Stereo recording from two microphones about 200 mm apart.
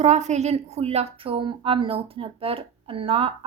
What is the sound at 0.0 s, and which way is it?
A woman's voice, 35° right (ahead or behind).